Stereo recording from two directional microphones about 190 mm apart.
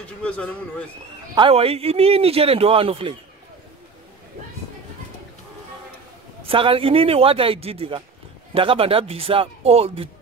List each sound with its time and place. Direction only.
0.2 s speech: 5° left (ahead or behind)
1.3 s speech: 30° right (ahead or behind)
6.4 s speech: 30° right (ahead or behind)